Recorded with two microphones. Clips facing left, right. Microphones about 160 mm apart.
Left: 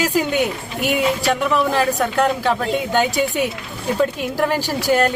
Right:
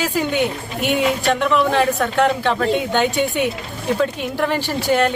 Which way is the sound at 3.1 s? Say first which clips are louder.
Even; 40° left (ahead or behind).